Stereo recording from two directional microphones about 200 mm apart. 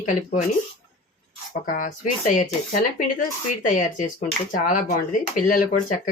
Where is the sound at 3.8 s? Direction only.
40° left (ahead or behind).